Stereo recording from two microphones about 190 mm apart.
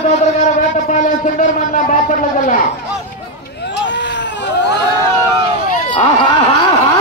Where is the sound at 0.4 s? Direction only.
40° left (ahead or behind).